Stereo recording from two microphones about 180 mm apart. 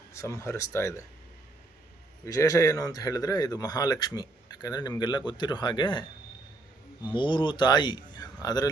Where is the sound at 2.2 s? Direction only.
15° left (ahead or behind).